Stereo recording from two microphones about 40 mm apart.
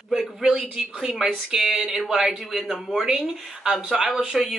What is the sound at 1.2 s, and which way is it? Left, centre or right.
Speech, centre.